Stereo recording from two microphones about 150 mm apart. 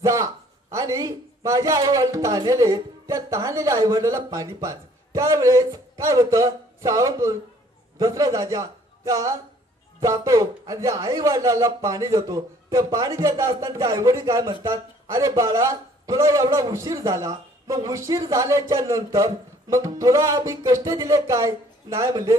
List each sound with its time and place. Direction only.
0.0 s a man's voice: 20° right (ahead or behind)